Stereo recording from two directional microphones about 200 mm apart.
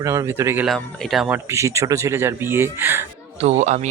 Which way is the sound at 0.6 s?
Centre (ahead or behind).